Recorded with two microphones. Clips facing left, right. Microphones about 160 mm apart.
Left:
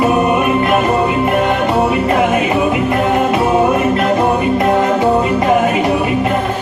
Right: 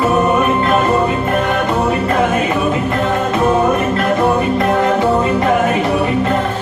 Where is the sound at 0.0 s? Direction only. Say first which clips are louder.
Left 1 dB; 15° left (ahead or behind).